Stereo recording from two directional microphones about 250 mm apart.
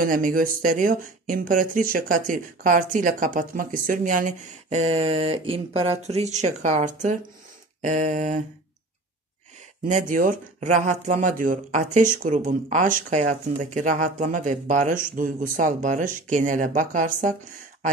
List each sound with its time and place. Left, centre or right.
0.0 s speech: right
7.8 s a sound: right
9.8 s speech: right